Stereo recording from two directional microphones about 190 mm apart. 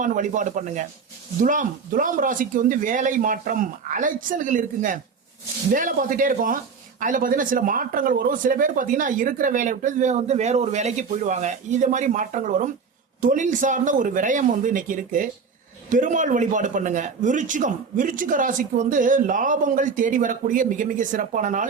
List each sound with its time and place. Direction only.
0.0 s a man's voice: 40° right (ahead or behind)